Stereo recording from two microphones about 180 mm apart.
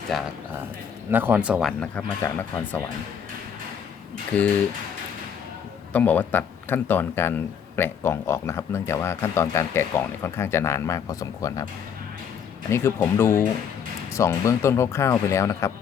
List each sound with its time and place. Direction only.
0.1 s speech: centre (ahead or behind)
1.1 s speech: 10° right (ahead or behind)
1.8 s speech: 5° left (ahead or behind)
4.3 s speech: 10° left (ahead or behind)
5.9 s speech: 10° left (ahead or behind)
12.7 s speech: 15° left (ahead or behind)